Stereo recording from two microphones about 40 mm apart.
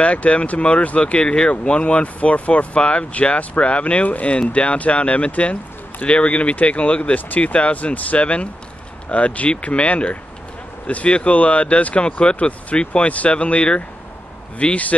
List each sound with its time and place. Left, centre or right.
0.0 s speech: left
7.2 s speech: left